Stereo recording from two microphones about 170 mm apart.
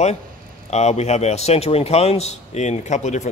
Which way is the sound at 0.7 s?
40° left (ahead or behind).